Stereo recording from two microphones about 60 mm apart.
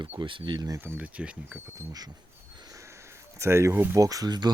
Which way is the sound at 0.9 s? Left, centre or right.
Right.